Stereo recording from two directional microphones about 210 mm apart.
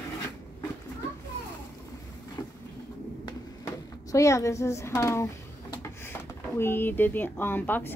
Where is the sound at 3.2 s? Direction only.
15° left (ahead or behind).